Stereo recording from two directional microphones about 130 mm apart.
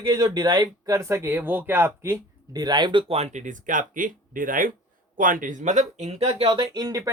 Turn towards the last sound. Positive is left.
turn(degrees=-30)  # may be behind; listen again after turning